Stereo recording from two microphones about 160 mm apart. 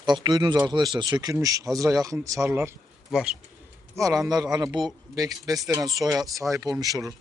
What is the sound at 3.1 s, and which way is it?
Speech, 5° right (ahead or behind).